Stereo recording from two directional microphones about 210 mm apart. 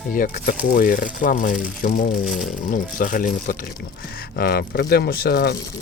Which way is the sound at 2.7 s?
40° left (ahead or behind).